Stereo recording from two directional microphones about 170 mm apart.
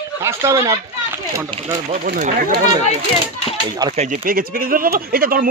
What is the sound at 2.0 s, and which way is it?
Speech, 60° right (ahead or behind).